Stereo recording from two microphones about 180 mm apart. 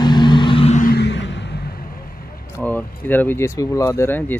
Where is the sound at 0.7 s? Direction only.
60° left (ahead or behind); by 1.6 s 75° left (ahead or behind).